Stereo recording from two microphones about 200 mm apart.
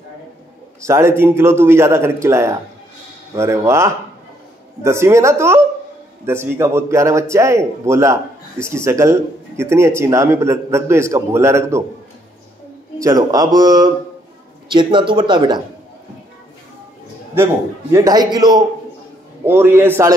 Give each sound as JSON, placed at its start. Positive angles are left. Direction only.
{"t": 0.8, "sound": "a man's voice", "side_deg": -15}
{"t": 13.0, "sound": "speech", "side_deg": -15}
{"t": 17.9, "sound": "a man's voice", "side_deg": -20}